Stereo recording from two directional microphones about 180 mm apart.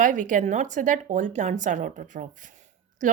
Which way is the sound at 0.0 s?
45° right (ahead or behind).